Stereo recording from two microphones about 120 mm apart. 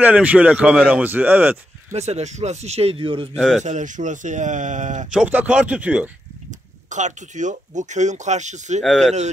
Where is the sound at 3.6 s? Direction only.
90° right.